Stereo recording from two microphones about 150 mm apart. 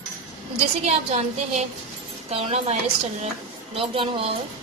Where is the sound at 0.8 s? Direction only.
45° right (ahead or behind).